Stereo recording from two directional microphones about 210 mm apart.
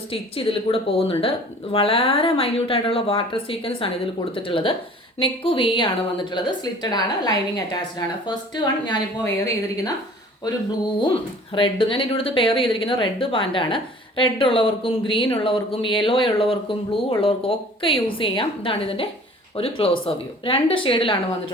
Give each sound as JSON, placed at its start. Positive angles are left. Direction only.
{"t": 0.1, "sound": "a woman's voice", "side_deg": 25}
{"t": 11.0, "sound": "a woman's voice", "side_deg": 25}